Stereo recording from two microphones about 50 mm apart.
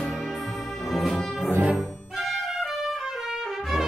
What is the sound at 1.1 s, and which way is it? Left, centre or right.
Music, centre.